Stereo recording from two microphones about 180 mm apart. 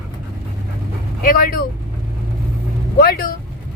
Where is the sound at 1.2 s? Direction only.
50° left (ahead or behind).